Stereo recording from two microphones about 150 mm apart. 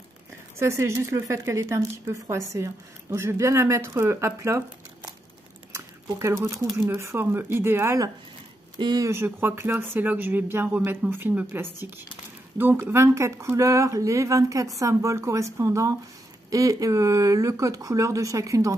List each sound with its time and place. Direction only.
0.6 s speech: 20° right (ahead or behind)
5.7 s a sound: 20° right (ahead or behind)
6.9 s speech: 15° right (ahead or behind)
8.7 s speech: 25° right (ahead or behind)